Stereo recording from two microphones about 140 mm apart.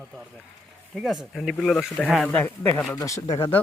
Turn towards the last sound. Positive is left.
turn(degrees=20)  # may be behind; listen again after turning